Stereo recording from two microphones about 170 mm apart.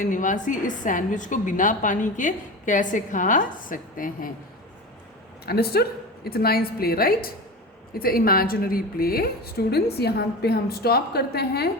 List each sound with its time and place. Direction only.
0.0 s a woman's voice: 50° left (ahead or behind)
5.5 s a woman's voice: 65° left (ahead or behind)